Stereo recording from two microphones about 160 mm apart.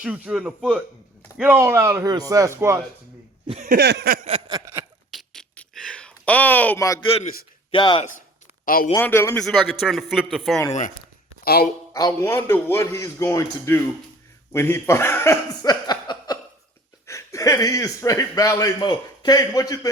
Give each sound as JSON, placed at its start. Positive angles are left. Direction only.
{"t": 0.0, "sound": "speech", "side_deg": -5}
{"t": 3.4, "sound": "speech", "side_deg": -35}
{"t": 3.7, "sound": "a sound", "side_deg": -90}
{"t": 4.3, "sound": "a sound", "side_deg": -30}
{"t": 5.1, "sound": "a sound", "side_deg": 5}
{"t": 7.0, "sound": "speech", "side_deg": 35}
{"t": 8.6, "sound": "speech", "side_deg": 65}
{"t": 9.0, "sound": "a man's voice", "side_deg": 15}
{"t": 9.4, "sound": "a man's voice", "side_deg": 0}
{"t": 11.4, "sound": "speech", "side_deg": 75}
{"t": 11.9, "sound": "a man's voice", "side_deg": 20}